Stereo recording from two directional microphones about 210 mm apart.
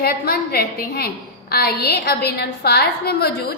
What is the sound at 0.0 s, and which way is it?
A woman's voice, 50° left (ahead or behind).